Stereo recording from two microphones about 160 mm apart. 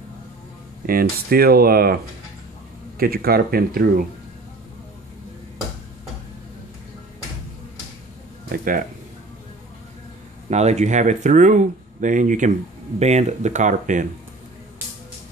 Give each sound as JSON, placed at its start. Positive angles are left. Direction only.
{"t": 0.8, "sound": "speech", "side_deg": -65}
{"t": 3.0, "sound": "speech", "side_deg": -70}
{"t": 8.5, "sound": "speech", "side_deg": -60}
{"t": 10.5, "sound": "speech", "side_deg": -45}